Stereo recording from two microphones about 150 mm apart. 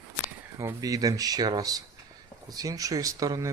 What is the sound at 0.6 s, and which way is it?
Speech, 20° right (ahead or behind).